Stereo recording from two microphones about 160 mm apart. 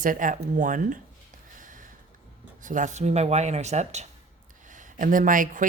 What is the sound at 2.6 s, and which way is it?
Speech, 55° right (ahead or behind).